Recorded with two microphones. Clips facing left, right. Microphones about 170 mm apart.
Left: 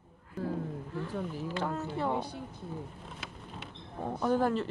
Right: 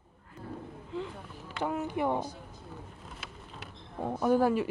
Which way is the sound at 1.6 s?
15° right (ahead or behind).